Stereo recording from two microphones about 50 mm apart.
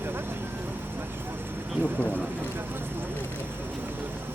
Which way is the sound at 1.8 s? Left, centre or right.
Left.